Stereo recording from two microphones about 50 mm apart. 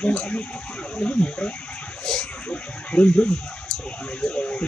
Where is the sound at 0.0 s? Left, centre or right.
Left.